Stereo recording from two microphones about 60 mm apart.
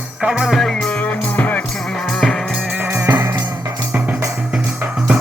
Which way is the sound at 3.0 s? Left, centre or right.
Right.